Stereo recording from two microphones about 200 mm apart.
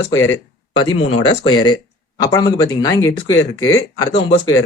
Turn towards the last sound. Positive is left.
turn(degrees=20)  # may be behind; listen again after turning